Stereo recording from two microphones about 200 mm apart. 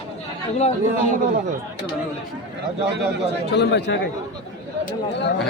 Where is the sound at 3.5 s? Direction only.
55° left (ahead or behind).